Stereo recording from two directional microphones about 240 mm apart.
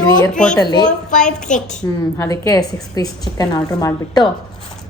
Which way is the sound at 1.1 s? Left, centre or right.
Left.